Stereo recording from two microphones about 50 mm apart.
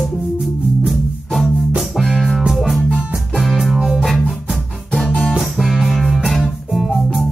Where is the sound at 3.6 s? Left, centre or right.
Centre.